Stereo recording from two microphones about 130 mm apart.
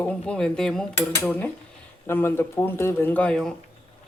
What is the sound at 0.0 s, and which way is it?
Speech, 10° left (ahead or behind).